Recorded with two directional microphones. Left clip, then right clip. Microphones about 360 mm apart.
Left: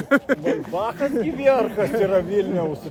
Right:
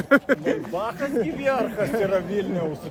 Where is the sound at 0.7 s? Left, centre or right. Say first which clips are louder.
Left 3 dB; left.